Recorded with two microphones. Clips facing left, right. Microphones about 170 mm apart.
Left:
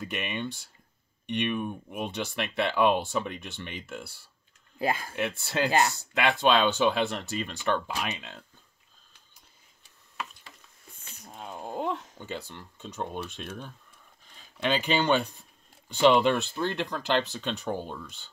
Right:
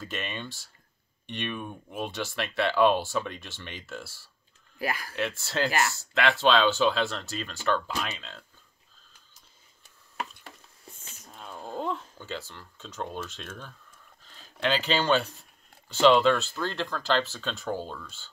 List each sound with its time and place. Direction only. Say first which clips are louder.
0.0 s speech: left 3 dB; 15° left (ahead or behind)
11.3 s a sound: left 1 dB; 20° left (ahead or behind)
14.3 s speech: even; 15° left (ahead or behind)